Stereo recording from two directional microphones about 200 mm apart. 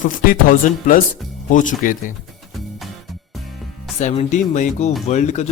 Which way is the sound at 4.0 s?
35° left (ahead or behind).